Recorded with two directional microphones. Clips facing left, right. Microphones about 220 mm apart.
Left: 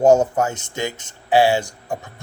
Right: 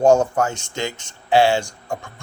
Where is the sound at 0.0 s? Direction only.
20° left (ahead or behind).